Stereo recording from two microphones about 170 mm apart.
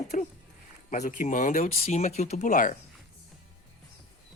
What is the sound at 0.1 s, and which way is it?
Speech, 45° left (ahead or behind).